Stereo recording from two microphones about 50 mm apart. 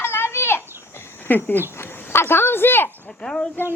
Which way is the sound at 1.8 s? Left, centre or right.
Left.